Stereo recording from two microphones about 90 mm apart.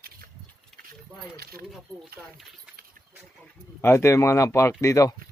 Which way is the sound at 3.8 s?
30° left (ahead or behind).